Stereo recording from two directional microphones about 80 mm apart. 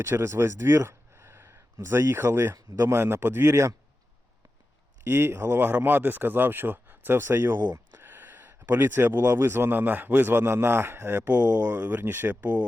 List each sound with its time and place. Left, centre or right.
0.0 s speech: right
5.0 s speech: right